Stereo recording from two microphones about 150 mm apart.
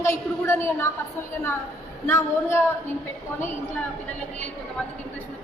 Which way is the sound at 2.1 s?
15° left (ahead or behind).